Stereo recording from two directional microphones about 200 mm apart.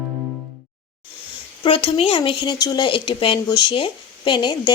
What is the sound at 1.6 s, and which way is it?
Speech, 25° left (ahead or behind).